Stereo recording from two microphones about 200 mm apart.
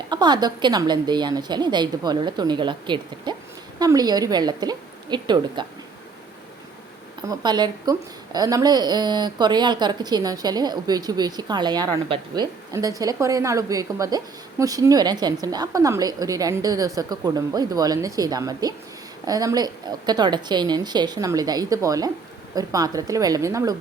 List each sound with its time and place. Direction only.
0.1 s a woman's voice: 20° right (ahead or behind)
7.3 s a woman's voice: 20° right (ahead or behind)